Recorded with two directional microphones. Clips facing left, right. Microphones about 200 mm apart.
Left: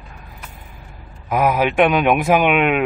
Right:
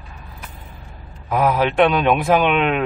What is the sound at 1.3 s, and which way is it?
Speech, 10° left (ahead or behind).